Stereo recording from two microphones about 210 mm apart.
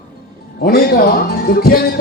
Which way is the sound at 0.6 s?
45° left (ahead or behind).